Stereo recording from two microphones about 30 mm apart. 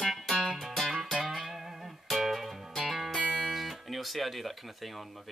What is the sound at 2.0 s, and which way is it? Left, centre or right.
Music, centre.